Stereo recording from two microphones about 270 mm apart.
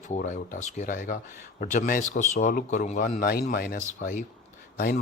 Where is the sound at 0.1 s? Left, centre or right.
Left.